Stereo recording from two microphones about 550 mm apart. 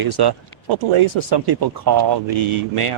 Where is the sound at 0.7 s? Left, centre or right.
Right.